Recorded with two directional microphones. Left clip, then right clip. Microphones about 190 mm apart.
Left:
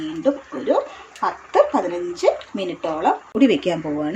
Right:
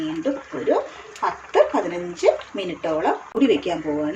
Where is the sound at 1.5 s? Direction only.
35° left (ahead or behind).